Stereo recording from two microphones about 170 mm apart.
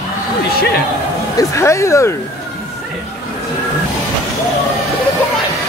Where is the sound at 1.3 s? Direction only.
15° left (ahead or behind).